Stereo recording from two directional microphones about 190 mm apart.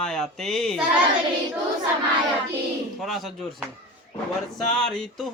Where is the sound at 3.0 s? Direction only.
Centre (ahead or behind).